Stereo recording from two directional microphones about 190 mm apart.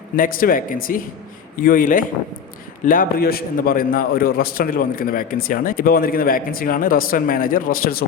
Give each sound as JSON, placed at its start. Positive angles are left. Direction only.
{"t": 0.2, "sound": "a man's voice", "side_deg": 50}